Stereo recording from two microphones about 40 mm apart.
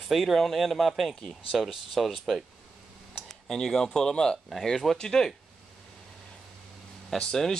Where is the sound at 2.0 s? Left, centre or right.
Centre.